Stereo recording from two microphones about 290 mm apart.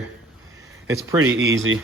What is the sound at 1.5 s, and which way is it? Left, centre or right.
Speech, right.